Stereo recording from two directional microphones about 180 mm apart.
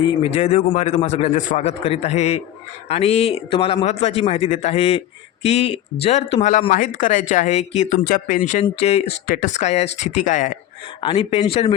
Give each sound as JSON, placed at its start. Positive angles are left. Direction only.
{"t": 0.2, "sound": "a man's voice", "side_deg": 40}
{"t": 8.6, "sound": "a man's voice", "side_deg": 35}
{"t": 9.0, "sound": "speech", "side_deg": 50}
{"t": 11.0, "sound": "a man's voice", "side_deg": 30}